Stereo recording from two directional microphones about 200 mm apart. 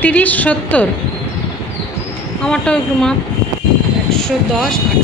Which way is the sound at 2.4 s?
5° left (ahead or behind).